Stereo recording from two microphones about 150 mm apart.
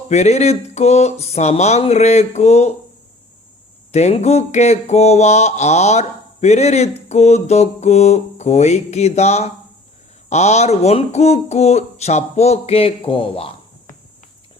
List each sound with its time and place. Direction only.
0.1 s mantra: 50° left (ahead or behind)
3.9 s mantra: 50° left (ahead or behind)